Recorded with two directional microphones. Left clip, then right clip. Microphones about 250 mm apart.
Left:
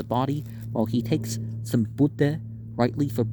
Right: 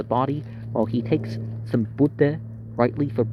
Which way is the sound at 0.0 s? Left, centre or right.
Left.